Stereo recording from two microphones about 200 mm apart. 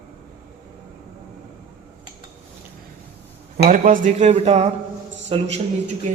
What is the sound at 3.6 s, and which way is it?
A man's voice, 40° right (ahead or behind).